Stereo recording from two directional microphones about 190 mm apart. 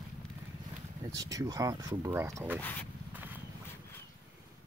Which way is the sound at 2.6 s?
10° left (ahead or behind).